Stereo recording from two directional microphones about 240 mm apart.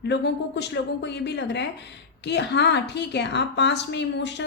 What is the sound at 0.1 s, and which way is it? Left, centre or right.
A woman's voice, left.